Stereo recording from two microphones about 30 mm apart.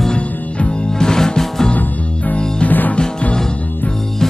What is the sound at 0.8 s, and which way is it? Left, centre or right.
Music, left.